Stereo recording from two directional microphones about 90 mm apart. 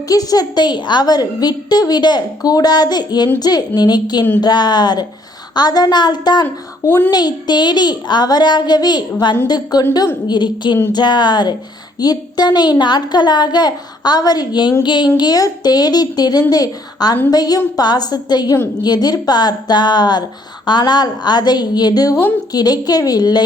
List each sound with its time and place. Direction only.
0.1 s a woman's voice: 45° left (ahead or behind)
6.8 s a child's voice: 25° left (ahead or behind)
7.1 s a woman's voice: 50° left (ahead or behind)
15.2 s a woman's voice: 45° left (ahead or behind)